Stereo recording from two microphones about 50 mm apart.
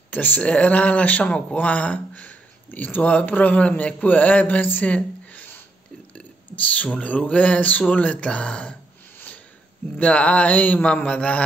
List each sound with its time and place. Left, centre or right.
0.1 s speech: left
6.7 s speech: left
9.9 s speech: left